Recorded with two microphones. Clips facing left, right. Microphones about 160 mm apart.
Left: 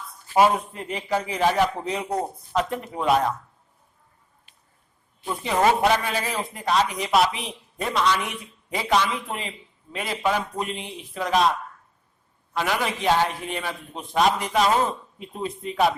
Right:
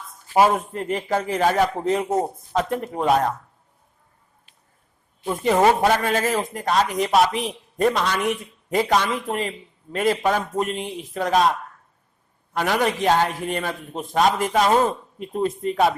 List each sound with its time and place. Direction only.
0.5 s speech: 45° right (ahead or behind)
5.3 s speech: 45° right (ahead or behind)
12.5 s speech: 45° right (ahead or behind)